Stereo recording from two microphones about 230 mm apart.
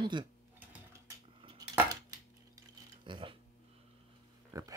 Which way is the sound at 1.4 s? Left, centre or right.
Right.